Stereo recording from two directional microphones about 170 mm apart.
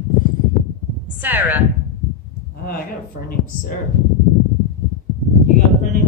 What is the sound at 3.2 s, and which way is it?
Speech, 55° left (ahead or behind).